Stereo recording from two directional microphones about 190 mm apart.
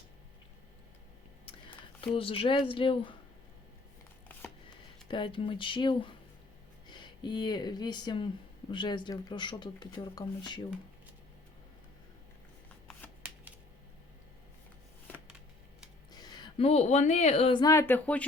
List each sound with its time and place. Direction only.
2.1 s speech: 30° left (ahead or behind)
5.0 s speech: 25° left (ahead or behind)
16.1 s speech: 20° left (ahead or behind)